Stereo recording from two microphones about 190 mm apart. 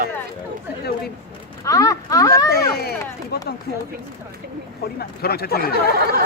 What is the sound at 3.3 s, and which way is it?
Speech, 55° left (ahead or behind).